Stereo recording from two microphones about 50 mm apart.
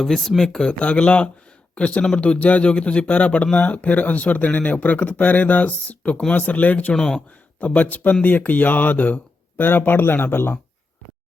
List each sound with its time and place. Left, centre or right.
0.0 s speech: centre
0.8 s speech: left
6.9 s speech: centre
7.6 s speech: left